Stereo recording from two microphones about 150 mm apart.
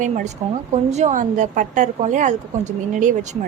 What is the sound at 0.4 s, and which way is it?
A woman's voice, 45° right (ahead or behind).